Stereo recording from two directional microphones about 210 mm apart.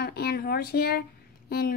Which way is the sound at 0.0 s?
50° left (ahead or behind).